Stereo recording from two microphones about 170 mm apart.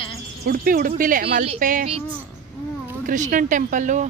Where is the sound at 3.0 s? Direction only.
50° right (ahead or behind).